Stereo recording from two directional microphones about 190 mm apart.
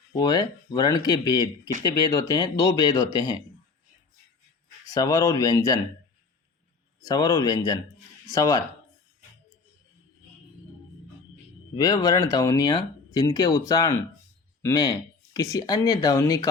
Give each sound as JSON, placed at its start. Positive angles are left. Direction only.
{"t": 0.1, "sound": "speech", "side_deg": 20}
{"t": 4.9, "sound": "speech", "side_deg": 20}
{"t": 7.0, "sound": "speech", "side_deg": 20}
{"t": 11.8, "sound": "speech", "side_deg": 20}